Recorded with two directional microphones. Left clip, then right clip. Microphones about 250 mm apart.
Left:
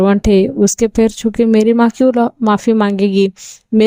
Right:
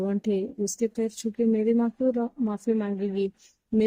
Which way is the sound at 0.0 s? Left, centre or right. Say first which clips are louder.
Left 16 dB; left.